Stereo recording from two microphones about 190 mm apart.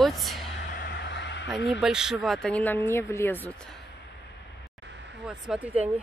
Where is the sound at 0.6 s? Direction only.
60° left (ahead or behind).